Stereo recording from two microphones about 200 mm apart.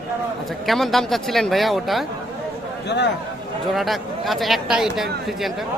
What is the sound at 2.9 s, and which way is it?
Speech, 60° left (ahead or behind).